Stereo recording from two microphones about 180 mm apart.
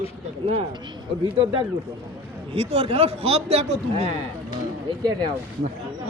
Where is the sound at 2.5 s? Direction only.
30° right (ahead or behind).